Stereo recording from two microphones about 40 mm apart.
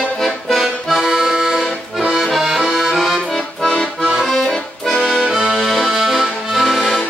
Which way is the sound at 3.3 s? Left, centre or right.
Centre.